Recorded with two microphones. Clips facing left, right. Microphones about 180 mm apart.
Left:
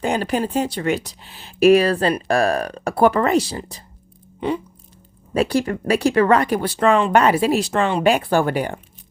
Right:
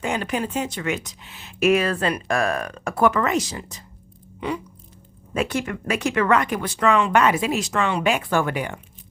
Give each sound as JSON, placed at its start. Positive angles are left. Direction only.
{"t": 0.0, "sound": "speech", "side_deg": 35}
{"t": 4.4, "sound": "music", "side_deg": 30}
{"t": 5.3, "sound": "speech", "side_deg": 35}